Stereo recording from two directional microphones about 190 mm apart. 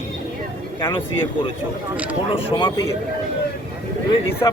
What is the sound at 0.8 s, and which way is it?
Speech, 25° left (ahead or behind).